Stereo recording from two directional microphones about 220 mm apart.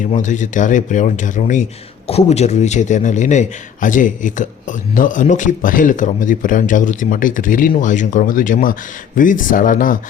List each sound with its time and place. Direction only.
0.0 s a man's voice: 35° left (ahead or behind)